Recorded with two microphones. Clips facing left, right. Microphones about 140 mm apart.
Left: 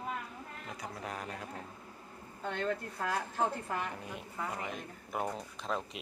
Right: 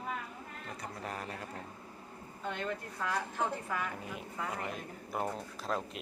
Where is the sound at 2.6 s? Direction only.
40° left (ahead or behind).